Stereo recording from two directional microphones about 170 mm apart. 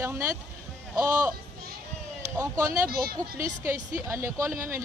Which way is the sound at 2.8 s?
60° right (ahead or behind).